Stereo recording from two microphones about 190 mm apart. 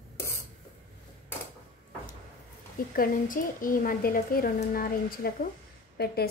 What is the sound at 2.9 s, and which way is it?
A woman's voice, 50° left (ahead or behind).